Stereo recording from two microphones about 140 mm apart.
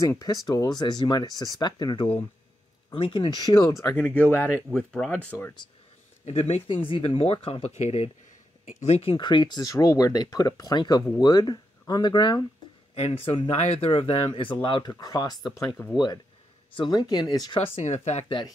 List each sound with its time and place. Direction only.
0.0 s speech: 25° left (ahead or behind)
3.9 s speech: 10° left (ahead or behind)
6.2 s speech: 50° left (ahead or behind); by 12.4 s 30° left (ahead or behind)
12.9 s speech: 45° left (ahead or behind); by 15.7 s 30° left (ahead or behind)
16.7 s speech: 30° left (ahead or behind)
17.6 s speech: 55° left (ahead or behind)